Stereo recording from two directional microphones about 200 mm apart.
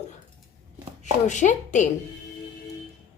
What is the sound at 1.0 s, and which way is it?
Speech, 35° left (ahead or behind).